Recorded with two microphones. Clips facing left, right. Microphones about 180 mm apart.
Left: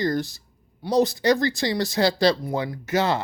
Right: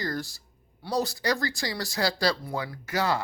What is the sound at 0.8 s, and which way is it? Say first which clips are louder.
Speech: left 8 dB; 20° left (ahead or behind).